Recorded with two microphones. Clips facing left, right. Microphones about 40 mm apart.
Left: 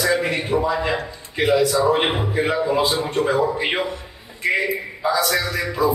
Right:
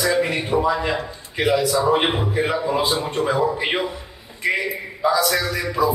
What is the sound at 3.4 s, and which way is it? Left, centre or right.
Speech, centre.